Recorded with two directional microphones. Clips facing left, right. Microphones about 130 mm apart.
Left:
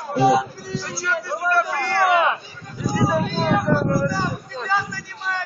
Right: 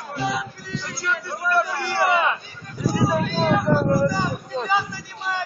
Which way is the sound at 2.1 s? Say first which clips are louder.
Left 3 dB; 5° left (ahead or behind).